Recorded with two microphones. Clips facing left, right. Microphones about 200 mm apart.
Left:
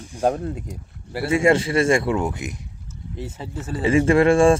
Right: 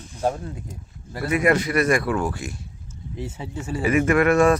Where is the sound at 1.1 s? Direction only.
25° left (ahead or behind).